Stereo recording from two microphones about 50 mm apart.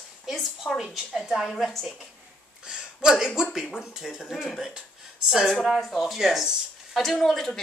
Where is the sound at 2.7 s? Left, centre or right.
Centre.